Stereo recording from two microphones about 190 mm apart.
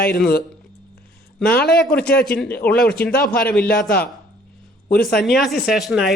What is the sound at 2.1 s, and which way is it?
Speech, 55° left (ahead or behind).